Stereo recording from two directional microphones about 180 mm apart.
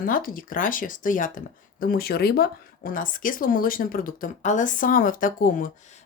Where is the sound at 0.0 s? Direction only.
50° left (ahead or behind).